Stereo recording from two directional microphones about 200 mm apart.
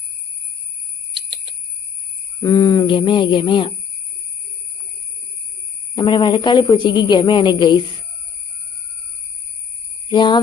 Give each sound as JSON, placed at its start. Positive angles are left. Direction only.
{"t": 1.1, "sound": "a sound", "side_deg": -25}
{"t": 2.4, "sound": "a woman's voice", "side_deg": 20}
{"t": 6.0, "sound": "a woman's voice", "side_deg": 25}
{"t": 10.1, "sound": "a woman's voice", "side_deg": 20}